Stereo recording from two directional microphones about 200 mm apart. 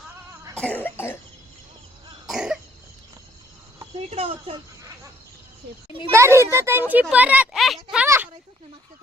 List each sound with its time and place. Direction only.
0.5 s cough: 5° left (ahead or behind)
2.2 s cough: centre (ahead or behind)
3.9 s cricket: 30° right (ahead or behind)
6.1 s speech: 15° right (ahead or behind)
7.9 s a sound: 10° right (ahead or behind)